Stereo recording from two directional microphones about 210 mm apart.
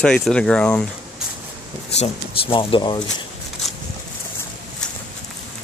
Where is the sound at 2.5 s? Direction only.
25° left (ahead or behind).